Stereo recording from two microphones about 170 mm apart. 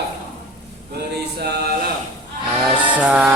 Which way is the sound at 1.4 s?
70° right (ahead or behind).